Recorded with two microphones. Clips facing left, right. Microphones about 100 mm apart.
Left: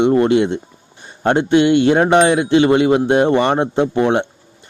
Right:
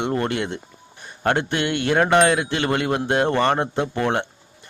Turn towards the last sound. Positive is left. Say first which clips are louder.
# left 7 dB
turn(degrees=20)  # may be behind; listen again after turning